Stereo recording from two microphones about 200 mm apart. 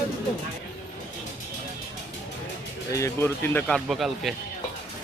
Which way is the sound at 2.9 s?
15° left (ahead or behind).